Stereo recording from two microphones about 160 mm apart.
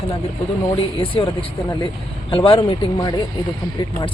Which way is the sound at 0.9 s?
35° left (ahead or behind).